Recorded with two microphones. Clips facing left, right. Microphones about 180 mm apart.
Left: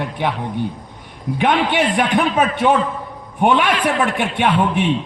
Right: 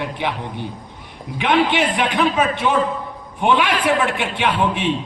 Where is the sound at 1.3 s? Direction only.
50° left (ahead or behind).